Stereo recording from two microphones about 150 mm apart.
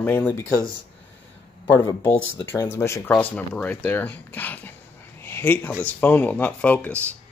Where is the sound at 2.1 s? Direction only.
15° left (ahead or behind).